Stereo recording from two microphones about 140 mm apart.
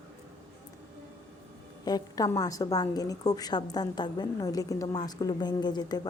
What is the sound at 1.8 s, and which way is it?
A woman's voice, 25° left (ahead or behind).